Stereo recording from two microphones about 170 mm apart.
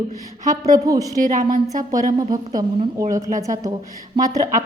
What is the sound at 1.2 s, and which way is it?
Speech, 50° right (ahead or behind).